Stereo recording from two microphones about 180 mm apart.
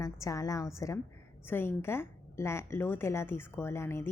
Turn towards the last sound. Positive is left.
turn(degrees=15)  # may be behind; listen again after turning